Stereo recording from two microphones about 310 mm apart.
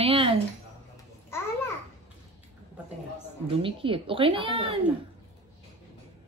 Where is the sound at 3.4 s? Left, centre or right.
Centre.